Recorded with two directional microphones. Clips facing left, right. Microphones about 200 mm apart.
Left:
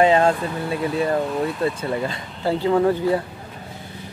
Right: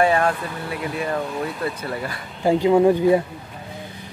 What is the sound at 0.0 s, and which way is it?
Speech, 25° left (ahead or behind).